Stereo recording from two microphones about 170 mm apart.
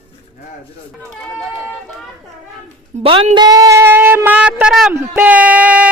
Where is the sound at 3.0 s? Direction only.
30° right (ahead or behind); by 5.8 s 5° right (ahead or behind).